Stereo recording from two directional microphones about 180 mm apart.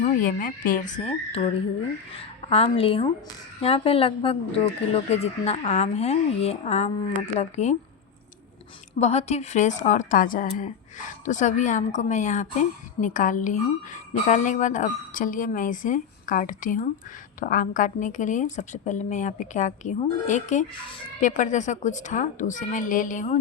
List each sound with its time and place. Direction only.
0.0 s a woman's voice: 45° left (ahead or behind)
2.5 s speech: 35° left (ahead or behind)
9.0 s a woman's voice: 40° left (ahead or behind)